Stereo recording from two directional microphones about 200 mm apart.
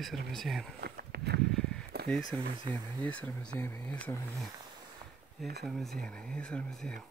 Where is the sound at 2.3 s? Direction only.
5° left (ahead or behind).